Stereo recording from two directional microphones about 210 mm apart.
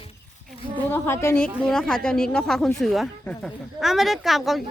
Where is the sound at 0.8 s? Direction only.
10° left (ahead or behind).